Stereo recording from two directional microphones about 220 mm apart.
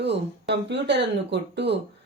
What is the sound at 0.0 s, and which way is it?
Speech, 50° right (ahead or behind).